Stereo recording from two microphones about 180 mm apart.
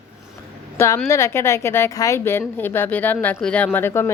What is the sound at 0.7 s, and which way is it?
A woman's voice, 15° left (ahead or behind).